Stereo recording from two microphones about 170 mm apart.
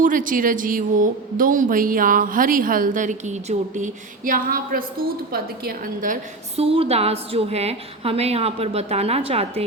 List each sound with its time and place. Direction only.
0.0 s a woman's voice: 50° right (ahead or behind)
6.6 s a woman's voice: 35° right (ahead or behind)